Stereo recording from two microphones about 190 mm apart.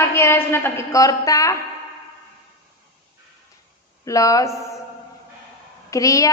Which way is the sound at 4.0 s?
15° left (ahead or behind).